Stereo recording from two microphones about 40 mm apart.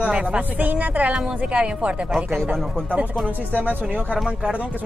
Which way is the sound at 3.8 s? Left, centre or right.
Right.